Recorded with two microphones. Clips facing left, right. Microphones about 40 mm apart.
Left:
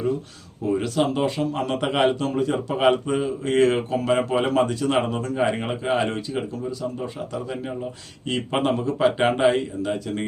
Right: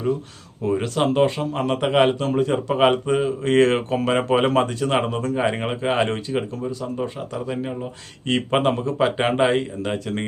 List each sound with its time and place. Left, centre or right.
0.7 s speech: right
1.4 s a man's voice: right
3.4 s speech: right
5.5 s a man's voice: right
8.4 s a man's voice: right
9.8 s speech: right